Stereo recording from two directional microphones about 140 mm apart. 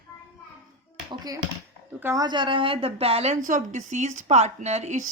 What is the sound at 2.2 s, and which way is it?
A woman's voice, 35° right (ahead or behind).